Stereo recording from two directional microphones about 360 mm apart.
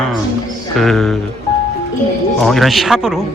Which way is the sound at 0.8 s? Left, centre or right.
Centre.